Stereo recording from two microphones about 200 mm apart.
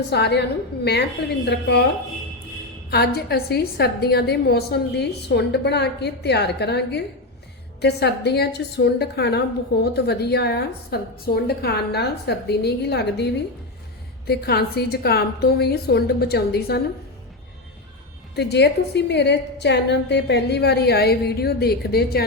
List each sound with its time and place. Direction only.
0.1 s a woman's voice: 55° left (ahead or behind)
1.5 s a woman's voice: 60° left (ahead or behind)
2.9 s a woman's voice: 55° left (ahead or behind)
18.3 s a woman's voice: 55° left (ahead or behind)